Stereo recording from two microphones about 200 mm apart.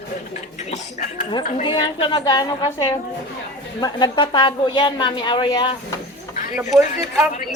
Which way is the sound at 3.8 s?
20° left (ahead or behind).